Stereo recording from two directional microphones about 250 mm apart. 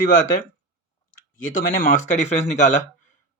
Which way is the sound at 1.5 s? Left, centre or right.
Left.